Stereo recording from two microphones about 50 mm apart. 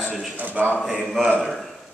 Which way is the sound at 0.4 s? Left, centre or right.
Right.